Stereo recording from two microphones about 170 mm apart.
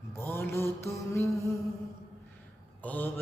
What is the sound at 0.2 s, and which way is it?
Mantra, 15° left (ahead or behind).